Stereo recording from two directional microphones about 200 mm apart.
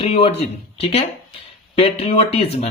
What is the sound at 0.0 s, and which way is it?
Speech, 30° left (ahead or behind).